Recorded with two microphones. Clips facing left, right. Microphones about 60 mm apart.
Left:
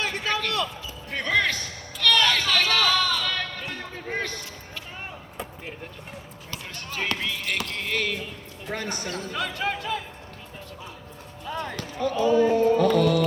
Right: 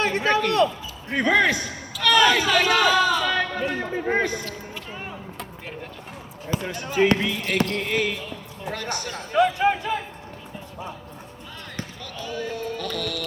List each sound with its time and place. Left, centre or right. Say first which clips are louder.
0.0 s a sound: right 6 dB; right
1.1 s music: right 5 dB; centre
2.0 s a sound: right 4 dB; centre
4.0 s music: right 6 dB; centre
6.7 s music: right 10 dB; centre
8.7 s music: even; left
9.1 s speech: right 13 dB; right
11.9 s music: left 14 dB; left